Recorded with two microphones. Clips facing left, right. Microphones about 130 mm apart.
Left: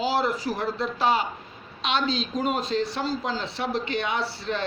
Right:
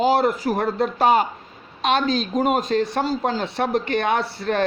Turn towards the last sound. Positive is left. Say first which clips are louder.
# right 6 dB
turn(degrees=-55)  # may be behind; listen again after turning